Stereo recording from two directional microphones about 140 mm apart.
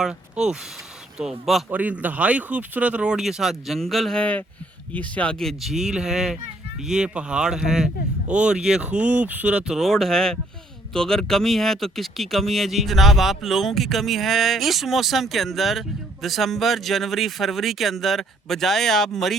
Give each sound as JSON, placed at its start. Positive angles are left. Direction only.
{"t": 0.0, "sound": "speech", "side_deg": -5}